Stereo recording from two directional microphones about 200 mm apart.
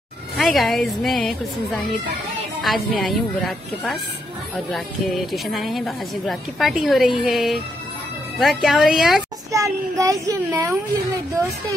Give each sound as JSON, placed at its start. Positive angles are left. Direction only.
{"t": 0.4, "sound": "a woman's voice", "side_deg": 0}
{"t": 9.5, "sound": "a child's voice", "side_deg": -15}